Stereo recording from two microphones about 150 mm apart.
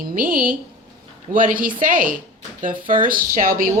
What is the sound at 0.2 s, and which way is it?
A woman's voice, 70° right (ahead or behind).